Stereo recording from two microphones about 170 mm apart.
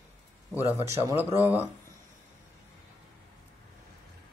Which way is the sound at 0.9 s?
15° right (ahead or behind).